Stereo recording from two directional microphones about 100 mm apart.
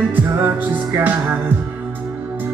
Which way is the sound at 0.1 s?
20° right (ahead or behind).